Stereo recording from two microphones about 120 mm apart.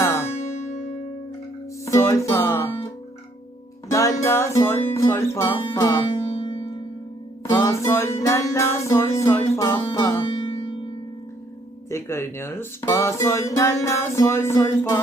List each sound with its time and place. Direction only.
0.0 s music: 20° left (ahead or behind)
0.3 s music: 60° left (ahead or behind)
1.8 s music: 25° left (ahead or behind)
3.9 s music: 25° left (ahead or behind)
4.9 s speech: 20° left (ahead or behind)
6.3 s music: 50° left (ahead or behind)
7.4 s music: 25° left (ahead or behind)
11.9 s speech: 20° left (ahead or behind)